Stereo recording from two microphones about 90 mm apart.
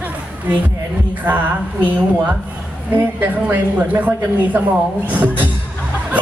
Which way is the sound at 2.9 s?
20° right (ahead or behind).